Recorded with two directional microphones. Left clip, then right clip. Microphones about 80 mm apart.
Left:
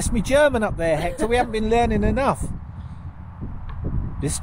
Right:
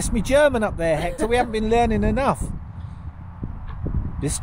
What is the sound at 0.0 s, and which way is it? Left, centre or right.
Speech, centre.